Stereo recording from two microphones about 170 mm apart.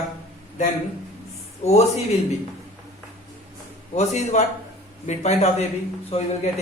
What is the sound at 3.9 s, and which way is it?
A man's voice, 40° left (ahead or behind).